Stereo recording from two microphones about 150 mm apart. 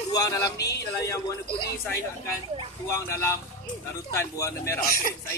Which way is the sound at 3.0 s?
20° left (ahead or behind).